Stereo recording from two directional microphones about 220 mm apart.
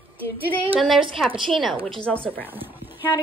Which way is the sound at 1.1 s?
Centre (ahead or behind).